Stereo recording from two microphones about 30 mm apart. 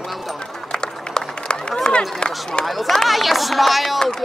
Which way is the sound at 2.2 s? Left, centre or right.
Left.